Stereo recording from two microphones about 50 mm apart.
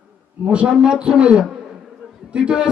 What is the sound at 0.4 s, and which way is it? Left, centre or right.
A man's voice, right.